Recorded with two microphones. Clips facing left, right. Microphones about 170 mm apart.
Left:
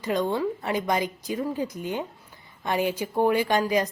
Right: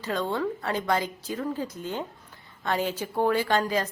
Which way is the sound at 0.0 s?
15° left (ahead or behind).